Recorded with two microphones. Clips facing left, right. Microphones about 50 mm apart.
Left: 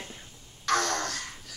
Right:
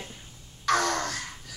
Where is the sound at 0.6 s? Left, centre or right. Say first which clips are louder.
Right 2 dB; centre.